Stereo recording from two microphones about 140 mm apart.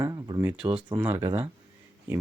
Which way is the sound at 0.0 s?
25° right (ahead or behind).